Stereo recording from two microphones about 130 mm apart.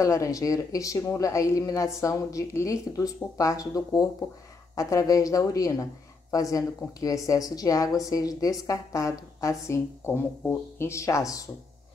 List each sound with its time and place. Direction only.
0.0 s a woman's voice: 25° left (ahead or behind)